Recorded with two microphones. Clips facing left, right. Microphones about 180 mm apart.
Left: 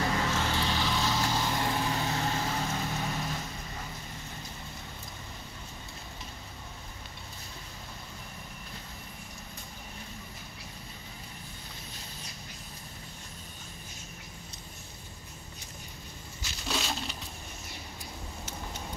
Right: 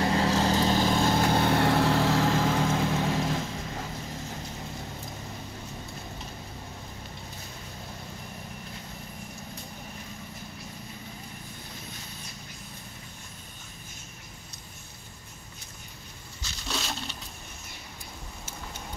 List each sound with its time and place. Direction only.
0.0 s vehicle: 30° right (ahead or behind); by 3.3 s 90° right
3.3 s vehicle: 50° right (ahead or behind)
16.6 s crushing: 5° left (ahead or behind)